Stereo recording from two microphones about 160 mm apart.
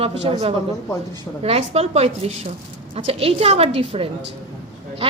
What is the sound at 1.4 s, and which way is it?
A woman's voice, 40° right (ahead or behind).